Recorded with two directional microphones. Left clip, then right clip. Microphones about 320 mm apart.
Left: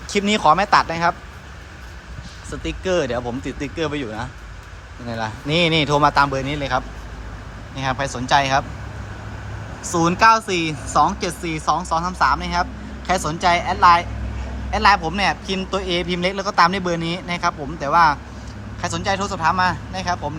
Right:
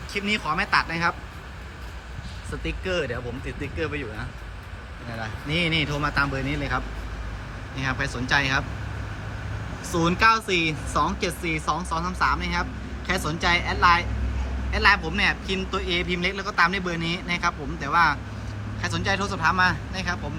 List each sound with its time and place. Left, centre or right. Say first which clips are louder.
0.1 s speech: left 10 dB; centre
2.6 s speech: left 6 dB; centre
9.9 s speech: left 6 dB; centre